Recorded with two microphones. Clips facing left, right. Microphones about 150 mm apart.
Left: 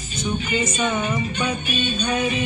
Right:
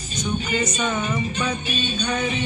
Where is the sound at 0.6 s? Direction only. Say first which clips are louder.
Left 1 dB; 10° left (ahead or behind).